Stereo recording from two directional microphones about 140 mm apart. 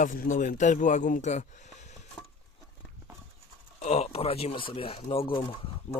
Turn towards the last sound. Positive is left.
turn(degrees=40)  # may be behind; listen again after turning